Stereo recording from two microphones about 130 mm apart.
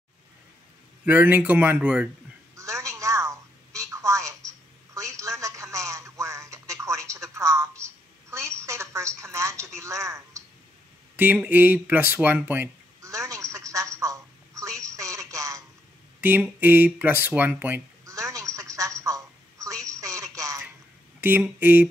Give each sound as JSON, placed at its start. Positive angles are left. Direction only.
{"t": 1.0, "sound": "speech", "side_deg": -15}
{"t": 2.5, "sound": "telephone", "side_deg": -25}
{"t": 9.8, "sound": "a sound", "side_deg": -25}
{"t": 11.1, "sound": "speech", "side_deg": -15}
{"t": 13.0, "sound": "telephone", "side_deg": -25}
{"t": 16.2, "sound": "a sound", "side_deg": -15}
{"t": 16.5, "sound": "speech", "side_deg": -15}
{"t": 18.0, "sound": "telephone", "side_deg": -25}
{"t": 21.2, "sound": "speech", "side_deg": -15}